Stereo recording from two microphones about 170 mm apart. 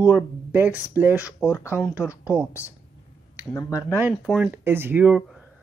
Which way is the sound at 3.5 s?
20° left (ahead or behind).